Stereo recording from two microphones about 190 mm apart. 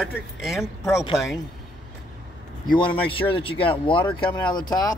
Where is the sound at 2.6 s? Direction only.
25° left (ahead or behind).